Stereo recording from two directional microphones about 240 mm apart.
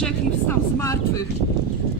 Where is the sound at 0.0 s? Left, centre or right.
Centre.